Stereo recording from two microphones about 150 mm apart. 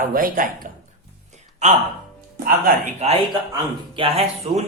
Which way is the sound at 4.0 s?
40° right (ahead or behind).